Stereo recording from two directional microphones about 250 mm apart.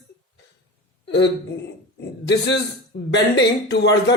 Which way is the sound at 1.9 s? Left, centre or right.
Left.